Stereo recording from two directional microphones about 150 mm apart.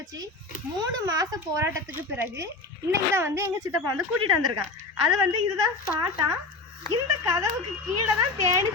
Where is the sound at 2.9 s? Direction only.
15° right (ahead or behind).